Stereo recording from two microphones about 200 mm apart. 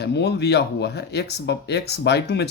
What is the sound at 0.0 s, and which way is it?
Speech, 55° left (ahead or behind).